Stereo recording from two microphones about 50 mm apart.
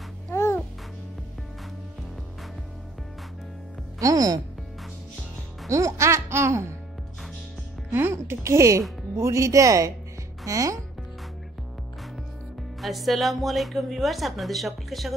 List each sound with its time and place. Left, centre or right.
0.3 s babbling: left
5.7 s speech: right
7.9 s music: right
8.5 s speech: right
12.8 s a woman's voice: centre